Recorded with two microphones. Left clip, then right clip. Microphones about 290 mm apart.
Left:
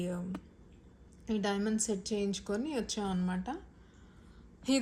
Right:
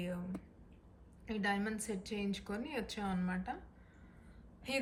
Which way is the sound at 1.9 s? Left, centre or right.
Left.